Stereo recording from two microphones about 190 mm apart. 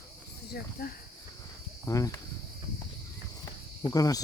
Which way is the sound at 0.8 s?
55° left (ahead or behind).